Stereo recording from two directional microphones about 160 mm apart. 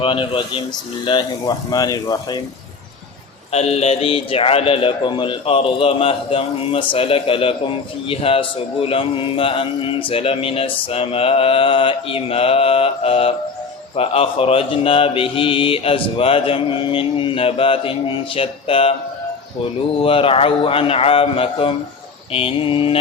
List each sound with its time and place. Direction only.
0.0 s a man's voice: 35° left (ahead or behind)
3.5 s a man's voice: 40° left (ahead or behind)
20.0 s a man's voice: 35° left (ahead or behind)